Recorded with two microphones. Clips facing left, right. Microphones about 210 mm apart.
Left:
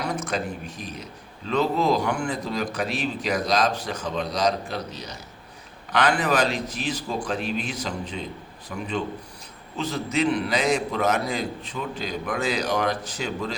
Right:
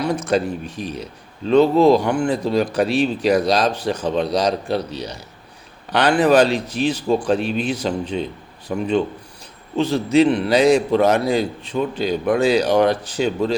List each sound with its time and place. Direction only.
0.3 s a man's voice: 30° right (ahead or behind)
9.7 s a man's voice: 30° right (ahead or behind)